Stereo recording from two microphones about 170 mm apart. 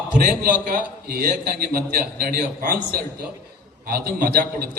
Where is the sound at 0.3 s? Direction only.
55° right (ahead or behind).